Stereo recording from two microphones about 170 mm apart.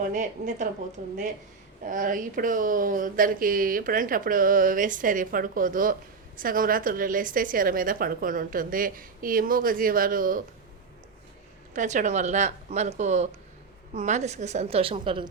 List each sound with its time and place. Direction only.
0.0 s speech: 45° right (ahead or behind)
1.8 s speech: 50° right (ahead or behind)
11.7 s a woman's voice: 45° right (ahead or behind); by 15.3 s 30° right (ahead or behind)